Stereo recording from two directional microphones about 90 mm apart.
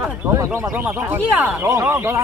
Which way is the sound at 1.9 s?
35° right (ahead or behind).